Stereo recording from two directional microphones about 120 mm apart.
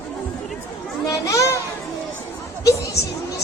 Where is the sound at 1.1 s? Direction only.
25° left (ahead or behind).